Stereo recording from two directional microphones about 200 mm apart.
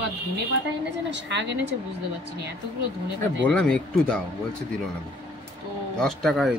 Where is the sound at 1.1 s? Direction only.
60° right (ahead or behind).